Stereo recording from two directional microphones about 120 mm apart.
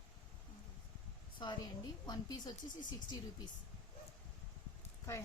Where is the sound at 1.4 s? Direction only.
35° left (ahead or behind).